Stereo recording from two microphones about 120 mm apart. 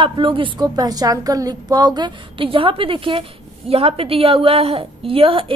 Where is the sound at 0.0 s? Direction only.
45° right (ahead or behind).